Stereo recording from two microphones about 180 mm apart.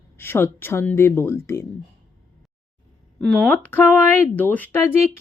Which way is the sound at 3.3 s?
10° left (ahead or behind).